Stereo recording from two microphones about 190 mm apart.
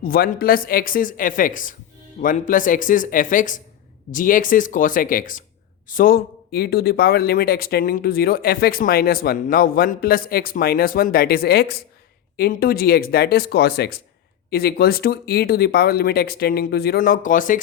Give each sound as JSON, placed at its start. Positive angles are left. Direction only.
{"t": 0.0, "sound": "speech", "side_deg": 50}